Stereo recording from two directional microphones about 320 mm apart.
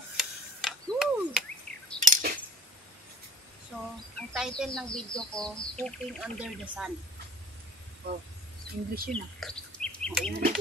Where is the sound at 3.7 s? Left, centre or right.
Centre.